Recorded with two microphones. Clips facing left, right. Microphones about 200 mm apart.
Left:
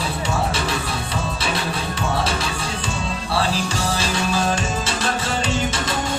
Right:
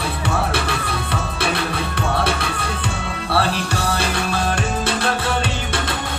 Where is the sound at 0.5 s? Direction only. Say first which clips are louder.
Right 1 dB; 60° right (ahead or behind).